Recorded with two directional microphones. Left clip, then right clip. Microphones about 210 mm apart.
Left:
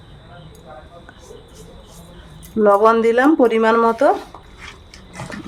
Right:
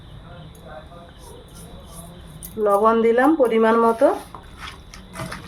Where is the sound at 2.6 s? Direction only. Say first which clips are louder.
Left 4 dB; 50° left (ahead or behind).